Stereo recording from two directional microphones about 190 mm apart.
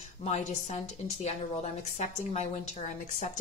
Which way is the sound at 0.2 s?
35° left (ahead or behind).